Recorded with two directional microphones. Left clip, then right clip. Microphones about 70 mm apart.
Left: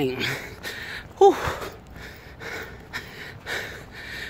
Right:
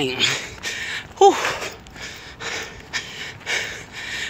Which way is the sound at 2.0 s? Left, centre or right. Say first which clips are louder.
Right 7 dB; left.